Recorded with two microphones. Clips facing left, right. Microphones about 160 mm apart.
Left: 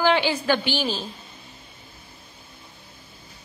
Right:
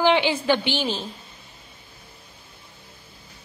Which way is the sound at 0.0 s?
20° right (ahead or behind).